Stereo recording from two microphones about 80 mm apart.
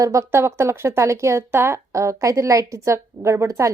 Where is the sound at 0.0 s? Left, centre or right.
Right.